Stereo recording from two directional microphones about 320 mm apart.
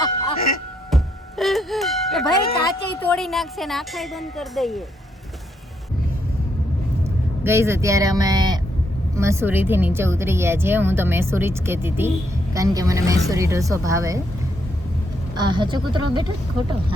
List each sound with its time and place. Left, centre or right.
0.3 s music: left
0.9 s music: centre
3.0 s a woman's voice: centre
7.0 s speech: centre
15.4 s speech: centre